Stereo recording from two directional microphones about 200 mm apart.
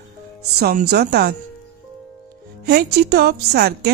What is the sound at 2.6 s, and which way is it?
A woman's voice, 55° right (ahead or behind).